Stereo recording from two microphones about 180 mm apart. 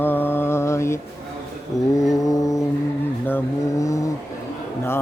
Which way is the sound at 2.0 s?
20° left (ahead or behind).